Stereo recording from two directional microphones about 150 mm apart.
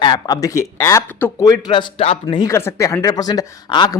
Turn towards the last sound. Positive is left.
turn(degrees=25)  # may be behind; listen again after turning